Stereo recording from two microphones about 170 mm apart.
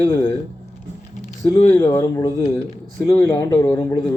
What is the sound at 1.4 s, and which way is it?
Speech, 20° left (ahead or behind).